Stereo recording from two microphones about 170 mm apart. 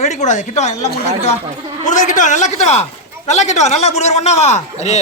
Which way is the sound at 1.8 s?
45° left (ahead or behind).